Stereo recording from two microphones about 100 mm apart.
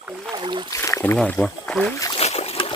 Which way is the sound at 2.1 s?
90° left.